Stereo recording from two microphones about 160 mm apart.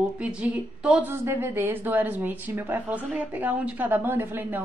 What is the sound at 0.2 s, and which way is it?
Speech, 5° right (ahead or behind).